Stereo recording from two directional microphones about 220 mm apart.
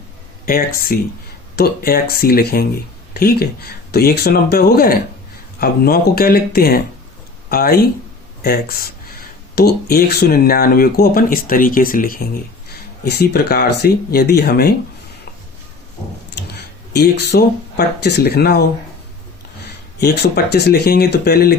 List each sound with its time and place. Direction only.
0.4 s speech: 40° left (ahead or behind)
16.5 s speech: 45° left (ahead or behind)
19.6 s speech: 45° left (ahead or behind)